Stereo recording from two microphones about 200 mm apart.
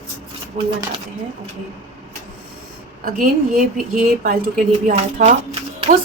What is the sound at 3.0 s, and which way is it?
Speech, 45° right (ahead or behind).